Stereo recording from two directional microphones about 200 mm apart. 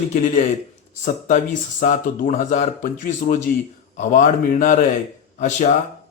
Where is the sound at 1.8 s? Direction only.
40° left (ahead or behind).